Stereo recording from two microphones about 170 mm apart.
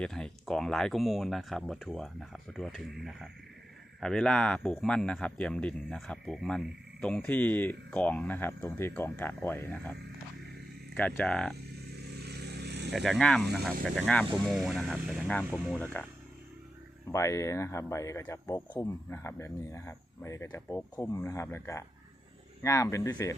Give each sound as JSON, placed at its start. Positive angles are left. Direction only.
{"t": 0.0, "sound": "speech", "side_deg": 5}
{"t": 10.9, "sound": "speech", "side_deg": 10}
{"t": 12.2, "sound": "vehicle", "side_deg": -75}
{"t": 12.9, "sound": "speech", "side_deg": 0}
{"t": 15.7, "sound": "speech", "side_deg": 10}
{"t": 17.1, "sound": "speech", "side_deg": 15}